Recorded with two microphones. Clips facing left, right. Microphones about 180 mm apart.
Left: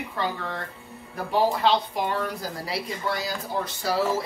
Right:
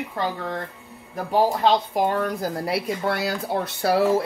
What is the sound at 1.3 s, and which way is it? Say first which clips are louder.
A woman's voice: right 3 dB; 45° right (ahead or behind).